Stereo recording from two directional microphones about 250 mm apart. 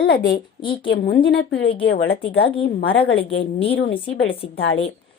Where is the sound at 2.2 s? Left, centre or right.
Left.